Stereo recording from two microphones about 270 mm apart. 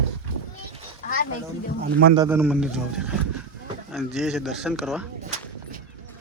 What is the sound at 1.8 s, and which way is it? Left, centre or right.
Speech, right.